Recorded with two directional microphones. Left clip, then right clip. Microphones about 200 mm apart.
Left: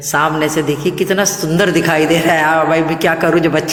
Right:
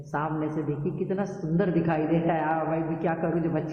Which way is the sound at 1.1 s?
30° left (ahead or behind).